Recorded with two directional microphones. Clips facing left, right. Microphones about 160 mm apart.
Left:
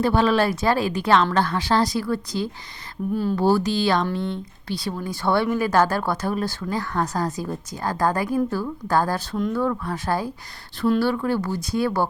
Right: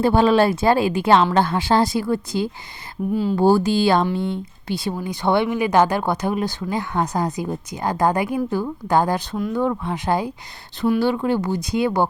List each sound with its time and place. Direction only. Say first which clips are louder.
0.0 s speech: right 4 dB; 25° right (ahead or behind)
4.0 s speech: right 3 dB; 5° right (ahead or behind)
4.7 s speech: right 3 dB; 25° right (ahead or behind)